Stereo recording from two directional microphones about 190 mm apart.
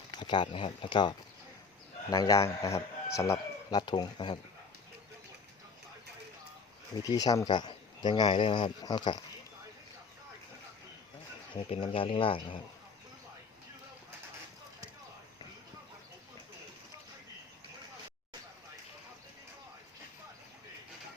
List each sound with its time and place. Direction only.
0.1 s a man's voice: 25° left (ahead or behind)
7.0 s a man's voice: 20° left (ahead or behind)
11.5 s a man's voice: 30° left (ahead or behind)